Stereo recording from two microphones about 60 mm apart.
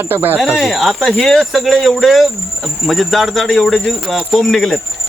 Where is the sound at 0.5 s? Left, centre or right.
Centre.